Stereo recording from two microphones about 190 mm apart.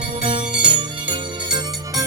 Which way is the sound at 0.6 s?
25° right (ahead or behind).